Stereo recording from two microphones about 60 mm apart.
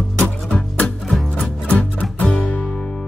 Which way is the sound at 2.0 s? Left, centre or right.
Left.